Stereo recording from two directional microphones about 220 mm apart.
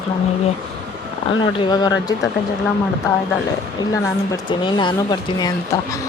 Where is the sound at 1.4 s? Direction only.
20° left (ahead or behind).